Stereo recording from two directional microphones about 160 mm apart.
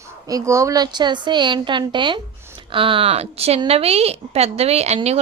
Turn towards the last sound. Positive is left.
turn(degrees=-40)  # may be behind; listen again after turning